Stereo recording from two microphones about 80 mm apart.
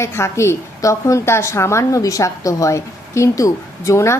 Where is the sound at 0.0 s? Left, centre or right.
Left.